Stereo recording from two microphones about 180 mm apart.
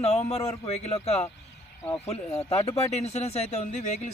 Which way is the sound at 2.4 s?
35° left (ahead or behind).